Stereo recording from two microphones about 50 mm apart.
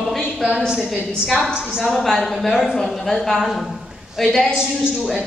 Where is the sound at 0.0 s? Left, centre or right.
Centre.